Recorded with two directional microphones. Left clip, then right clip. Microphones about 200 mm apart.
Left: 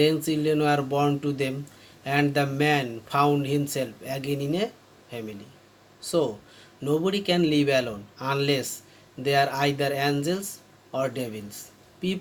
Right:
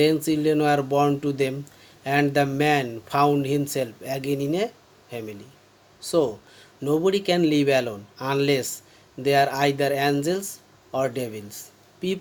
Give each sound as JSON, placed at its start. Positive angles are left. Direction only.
{"t": 0.0, "sound": "speech", "side_deg": -50}